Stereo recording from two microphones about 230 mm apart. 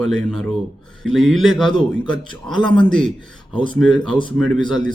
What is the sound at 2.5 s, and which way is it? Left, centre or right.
Speech, centre.